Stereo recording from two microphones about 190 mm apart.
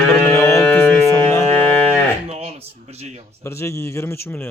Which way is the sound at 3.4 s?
15° left (ahead or behind).